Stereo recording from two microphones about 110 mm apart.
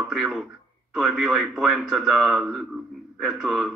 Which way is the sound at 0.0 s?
Centre (ahead or behind).